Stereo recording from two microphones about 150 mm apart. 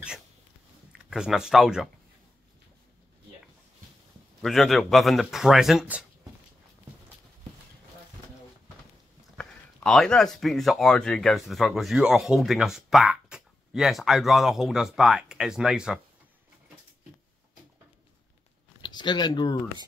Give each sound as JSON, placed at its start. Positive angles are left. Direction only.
{"t": 1.1, "sound": "speech", "side_deg": -5}
{"t": 4.4, "sound": "speech", "side_deg": 0}
{"t": 9.4, "sound": "speech", "side_deg": 5}
{"t": 18.8, "sound": "speech", "side_deg": 30}